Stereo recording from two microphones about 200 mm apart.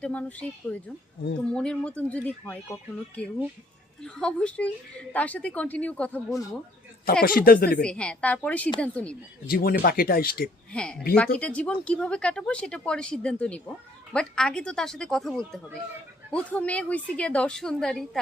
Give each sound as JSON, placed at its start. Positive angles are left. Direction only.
{"t": 0.0, "sound": "speech", "side_deg": 5}
{"t": 7.0, "sound": "speech", "side_deg": 50}
{"t": 7.8, "sound": "speech", "side_deg": 5}
{"t": 9.5, "sound": "speech", "side_deg": 50}
{"t": 10.7, "sound": "speech", "side_deg": 5}